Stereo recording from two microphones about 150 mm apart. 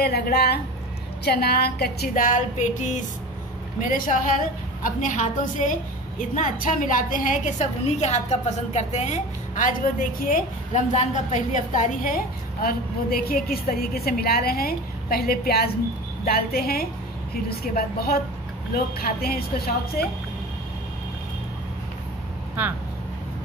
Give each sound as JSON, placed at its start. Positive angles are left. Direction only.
{"t": 0.0, "sound": "a woman's voice", "side_deg": 90}
{"t": 12.6, "sound": "a woman's voice", "side_deg": 80}